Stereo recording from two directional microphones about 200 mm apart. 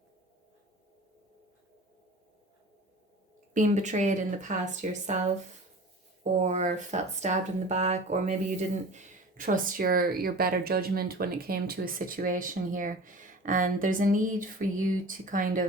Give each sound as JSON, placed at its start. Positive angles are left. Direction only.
{"t": 3.5, "sound": "speech", "side_deg": -40}
{"t": 6.3, "sound": "speech", "side_deg": -35}